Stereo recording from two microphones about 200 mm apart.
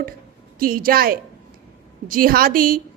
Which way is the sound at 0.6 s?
45° right (ahead or behind).